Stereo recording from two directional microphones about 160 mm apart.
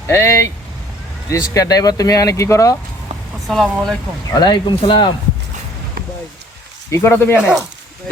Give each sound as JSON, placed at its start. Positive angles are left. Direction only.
{"t": 0.1, "sound": "speech", "side_deg": 15}
{"t": 3.4, "sound": "speech", "side_deg": 0}
{"t": 4.4, "sound": "speech", "side_deg": 25}
{"t": 6.9, "sound": "speech", "side_deg": 15}